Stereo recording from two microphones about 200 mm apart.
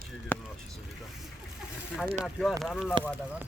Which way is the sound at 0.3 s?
10° left (ahead or behind).